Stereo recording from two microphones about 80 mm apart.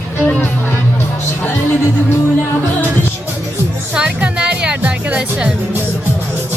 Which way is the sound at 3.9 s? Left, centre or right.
Centre.